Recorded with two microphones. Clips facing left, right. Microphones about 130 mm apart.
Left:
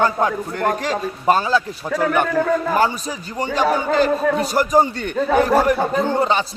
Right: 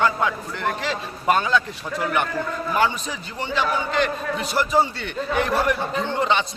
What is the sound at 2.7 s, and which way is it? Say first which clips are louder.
A man's voice: left 3 dB; 40° left (ahead or behind).